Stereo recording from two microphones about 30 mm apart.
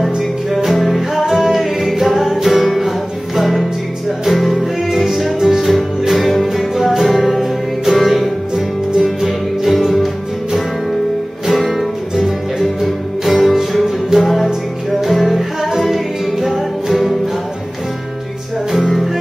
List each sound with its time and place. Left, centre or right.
0.7 s music: centre
1.2 s music: centre
1.5 s music: centre
4.3 s music: centre
5.7 s music: centre
7.9 s music: centre
8.5 s music: centre
11.4 s music: centre
13.2 s music: centre
18.7 s music: centre